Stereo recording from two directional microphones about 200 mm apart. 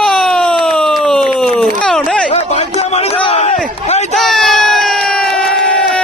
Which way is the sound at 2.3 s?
35° left (ahead or behind).